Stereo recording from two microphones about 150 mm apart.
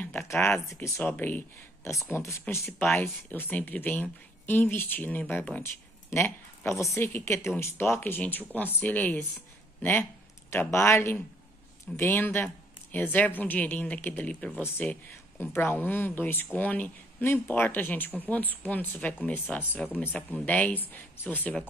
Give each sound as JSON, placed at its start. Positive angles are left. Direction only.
{"t": 0.0, "sound": "speech", "side_deg": 10}